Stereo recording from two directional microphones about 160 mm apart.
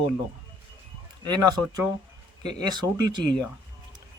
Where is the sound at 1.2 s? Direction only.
25° right (ahead or behind).